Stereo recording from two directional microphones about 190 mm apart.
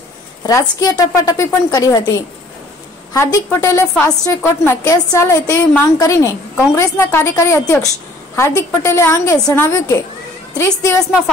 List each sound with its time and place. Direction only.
0.5 s a woman's voice: 15° left (ahead or behind)
3.1 s a woman's voice: 15° left (ahead or behind)